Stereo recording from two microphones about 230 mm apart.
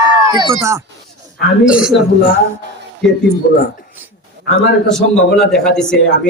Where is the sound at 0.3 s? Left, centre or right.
Right; by 3.2 s centre.